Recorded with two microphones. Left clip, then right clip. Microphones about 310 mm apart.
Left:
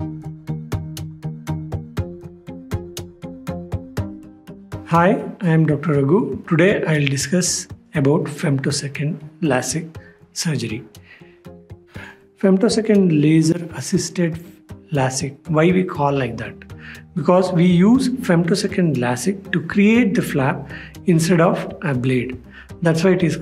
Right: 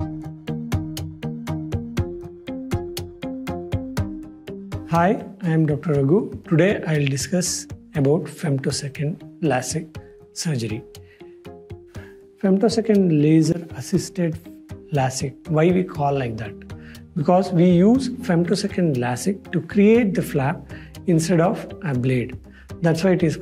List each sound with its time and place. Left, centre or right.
4.8 s speech: right
12.4 s speech: right